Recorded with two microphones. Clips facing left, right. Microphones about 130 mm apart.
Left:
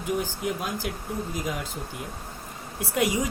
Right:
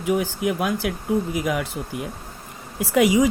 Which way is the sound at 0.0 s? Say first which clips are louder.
Right 6 dB; 80° right.